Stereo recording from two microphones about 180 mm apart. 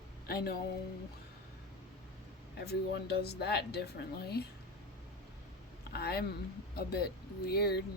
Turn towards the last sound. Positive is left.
turn(degrees=60)  # may be behind; listen again after turning